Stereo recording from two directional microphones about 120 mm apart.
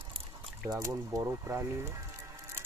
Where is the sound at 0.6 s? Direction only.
30° right (ahead or behind).